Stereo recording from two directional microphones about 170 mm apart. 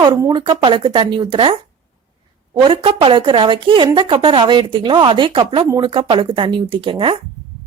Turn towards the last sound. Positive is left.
turn(degrees=-30)  # may be behind; listen again after turning